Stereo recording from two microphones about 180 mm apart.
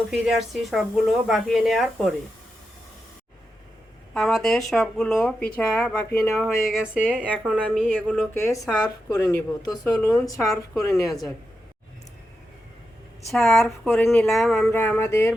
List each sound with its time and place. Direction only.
0.1 s speech: centre (ahead or behind)
4.1 s speech: centre (ahead or behind)
6.3 s speech: centre (ahead or behind)
8.3 s speech: 15° left (ahead or behind)
13.3 s speech: centre (ahead or behind)
14.7 s speech: 10° left (ahead or behind)